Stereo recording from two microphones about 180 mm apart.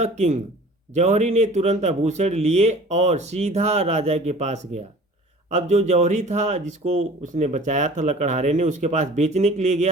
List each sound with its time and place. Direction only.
0.0 s speech: 40° right (ahead or behind)